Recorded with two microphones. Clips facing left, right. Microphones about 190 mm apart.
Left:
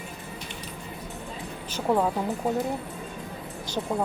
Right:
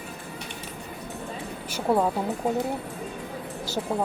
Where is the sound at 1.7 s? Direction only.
10° right (ahead or behind).